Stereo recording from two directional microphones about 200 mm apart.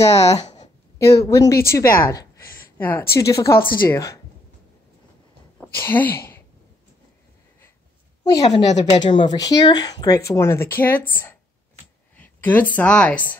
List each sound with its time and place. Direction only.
0.1 s speech: 30° left (ahead or behind)
0.6 s a sound: 15° left (ahead or behind)
3.2 s speech: 15° left (ahead or behind)
5.6 s speech: 10° left (ahead or behind)
8.2 s a woman's voice: 20° left (ahead or behind)
8.6 s speech: 35° left (ahead or behind)
9.0 s speech: 25° left (ahead or behind)
12.2 s a sound: 10° left (ahead or behind)
12.7 s speech: 5° left (ahead or behind)